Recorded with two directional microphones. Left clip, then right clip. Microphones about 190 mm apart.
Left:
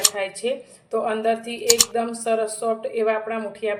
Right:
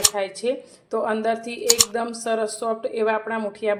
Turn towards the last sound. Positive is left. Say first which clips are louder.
# right 1 dB
turn(degrees=-35)  # may be behind; listen again after turning